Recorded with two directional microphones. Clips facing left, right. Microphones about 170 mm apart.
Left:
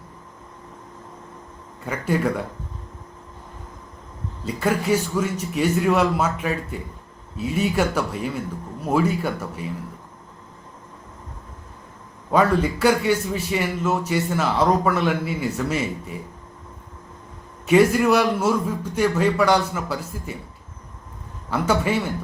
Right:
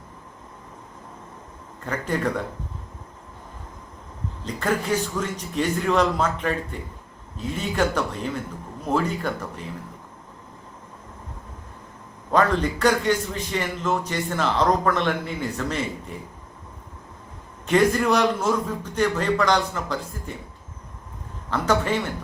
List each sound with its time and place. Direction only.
1.8 s a man's voice: 10° left (ahead or behind)
4.4 s a man's voice: 10° left (ahead or behind)
12.3 s a man's voice: 10° left (ahead or behind)
17.7 s a man's voice: 10° left (ahead or behind)
21.5 s a man's voice: 10° left (ahead or behind)